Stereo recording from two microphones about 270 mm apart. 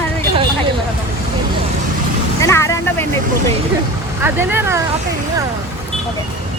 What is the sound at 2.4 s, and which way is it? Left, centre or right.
Speech, centre.